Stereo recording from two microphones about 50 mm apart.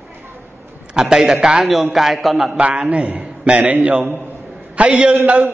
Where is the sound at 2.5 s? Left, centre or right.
Right.